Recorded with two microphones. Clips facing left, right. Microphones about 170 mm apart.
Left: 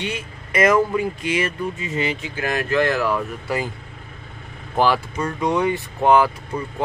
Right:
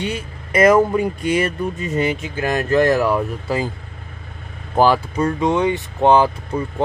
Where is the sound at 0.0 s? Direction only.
35° right (ahead or behind).